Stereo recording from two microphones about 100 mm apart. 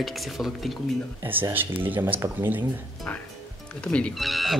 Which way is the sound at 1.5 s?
20° right (ahead or behind).